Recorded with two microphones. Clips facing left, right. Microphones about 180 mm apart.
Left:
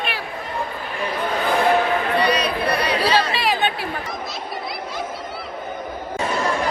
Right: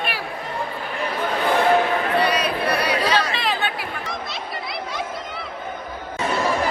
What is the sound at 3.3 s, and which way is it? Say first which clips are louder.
Chatter: left 3 dB; 10° left (ahead or behind).